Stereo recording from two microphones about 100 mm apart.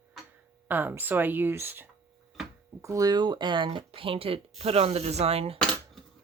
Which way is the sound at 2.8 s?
35° right (ahead or behind).